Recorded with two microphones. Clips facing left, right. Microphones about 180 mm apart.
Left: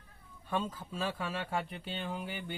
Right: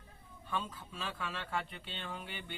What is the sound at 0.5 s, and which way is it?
Speech, 40° left (ahead or behind).